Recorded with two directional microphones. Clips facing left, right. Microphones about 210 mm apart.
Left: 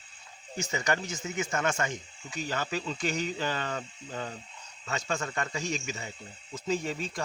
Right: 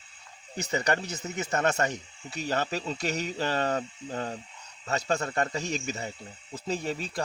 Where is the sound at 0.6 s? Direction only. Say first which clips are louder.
Right 2 dB; 35° right (ahead or behind).